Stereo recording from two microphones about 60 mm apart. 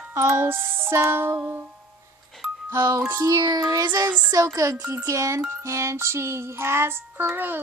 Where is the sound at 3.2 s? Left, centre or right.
Right.